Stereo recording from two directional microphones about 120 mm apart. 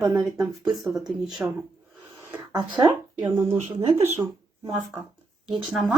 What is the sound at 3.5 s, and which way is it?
Speech, 55° right (ahead or behind).